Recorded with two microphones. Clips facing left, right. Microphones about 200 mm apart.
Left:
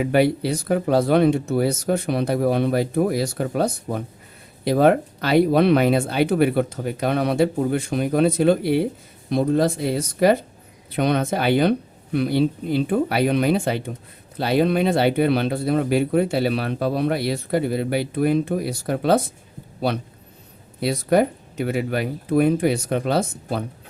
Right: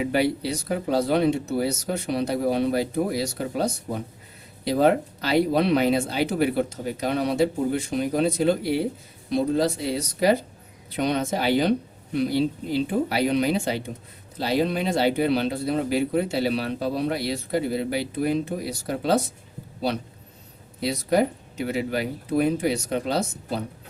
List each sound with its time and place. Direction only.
0.0 s speech: 55° left (ahead or behind)
20.8 s speech: 55° left (ahead or behind)